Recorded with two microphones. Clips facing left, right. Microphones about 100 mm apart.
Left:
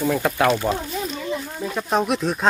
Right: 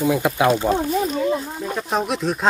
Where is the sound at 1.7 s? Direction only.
Centre (ahead or behind).